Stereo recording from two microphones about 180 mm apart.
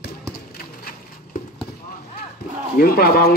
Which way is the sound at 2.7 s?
55° left (ahead or behind).